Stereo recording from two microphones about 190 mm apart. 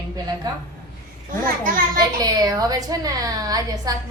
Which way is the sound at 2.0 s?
20° right (ahead or behind).